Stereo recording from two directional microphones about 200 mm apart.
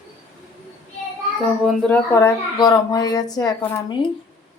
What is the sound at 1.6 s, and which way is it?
Speech, 10° left (ahead or behind).